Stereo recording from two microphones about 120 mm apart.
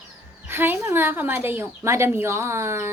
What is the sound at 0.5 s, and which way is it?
A woman's voice, 20° right (ahead or behind).